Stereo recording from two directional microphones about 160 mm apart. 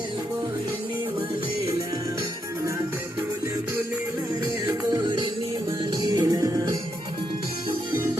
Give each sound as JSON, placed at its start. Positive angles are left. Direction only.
{"t": 4.6, "sound": "music", "side_deg": -30}